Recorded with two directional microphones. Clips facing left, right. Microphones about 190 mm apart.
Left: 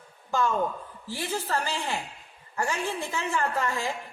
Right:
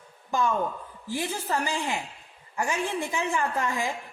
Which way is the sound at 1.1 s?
15° right (ahead or behind).